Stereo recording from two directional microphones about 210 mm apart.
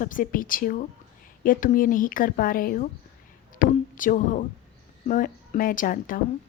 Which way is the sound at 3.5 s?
40° left (ahead or behind).